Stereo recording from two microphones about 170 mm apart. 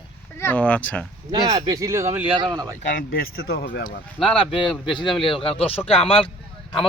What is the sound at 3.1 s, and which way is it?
Speech, 60° left (ahead or behind).